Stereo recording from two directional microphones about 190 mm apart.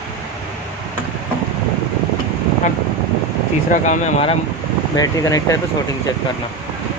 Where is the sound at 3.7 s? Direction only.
40° left (ahead or behind).